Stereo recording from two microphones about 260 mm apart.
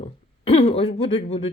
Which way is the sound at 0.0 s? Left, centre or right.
Left.